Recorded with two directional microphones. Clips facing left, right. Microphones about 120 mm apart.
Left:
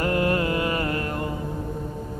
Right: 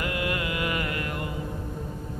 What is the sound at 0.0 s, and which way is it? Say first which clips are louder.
Music: left 7 dB; 40° left (ahead or behind).